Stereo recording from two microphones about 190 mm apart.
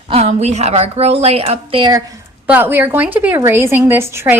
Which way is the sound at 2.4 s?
10° right (ahead or behind).